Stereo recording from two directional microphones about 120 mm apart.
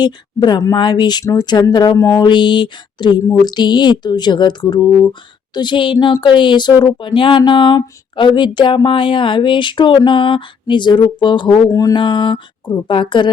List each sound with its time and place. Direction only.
0.0 s speech: 35° left (ahead or behind)
11.7 s speech: 30° left (ahead or behind)
11.9 s a woman's voice: 40° left (ahead or behind)